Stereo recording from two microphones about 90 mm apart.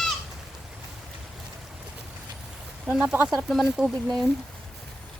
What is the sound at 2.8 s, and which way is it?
Speech, 10° right (ahead or behind).